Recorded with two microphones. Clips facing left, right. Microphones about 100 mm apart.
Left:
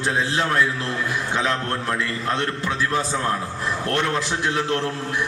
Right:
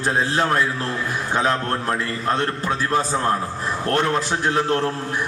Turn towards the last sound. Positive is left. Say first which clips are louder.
# right 3 dB
turn(degrees=-40)  # may be behind; listen again after turning